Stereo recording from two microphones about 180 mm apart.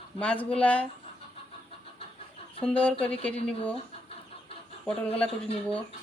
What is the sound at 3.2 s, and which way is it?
Speech, 10° left (ahead or behind).